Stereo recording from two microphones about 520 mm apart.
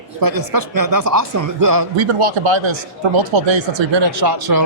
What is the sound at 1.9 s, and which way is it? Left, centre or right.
Speech, right.